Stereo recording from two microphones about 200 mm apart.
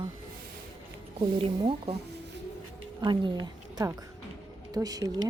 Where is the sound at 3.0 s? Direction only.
20° right (ahead or behind).